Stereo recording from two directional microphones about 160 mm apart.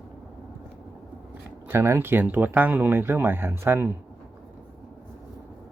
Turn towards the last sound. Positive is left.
turn(degrees=-15)  # may be behind; listen again after turning